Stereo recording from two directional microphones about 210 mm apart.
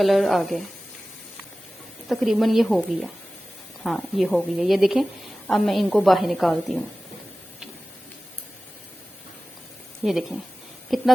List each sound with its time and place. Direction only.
0.0 s a woman's voice: centre (ahead or behind)
2.0 s a woman's voice: centre (ahead or behind)
10.0 s a woman's voice: centre (ahead or behind)